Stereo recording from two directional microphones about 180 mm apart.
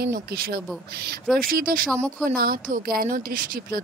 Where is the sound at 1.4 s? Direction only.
50° right (ahead or behind).